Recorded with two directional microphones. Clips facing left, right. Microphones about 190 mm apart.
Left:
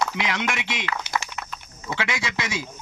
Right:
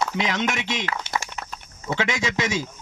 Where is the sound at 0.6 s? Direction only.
40° right (ahead or behind).